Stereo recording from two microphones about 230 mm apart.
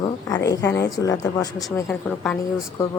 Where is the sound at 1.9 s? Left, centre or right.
Centre.